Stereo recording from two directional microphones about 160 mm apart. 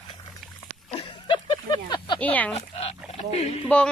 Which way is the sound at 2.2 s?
10° left (ahead or behind).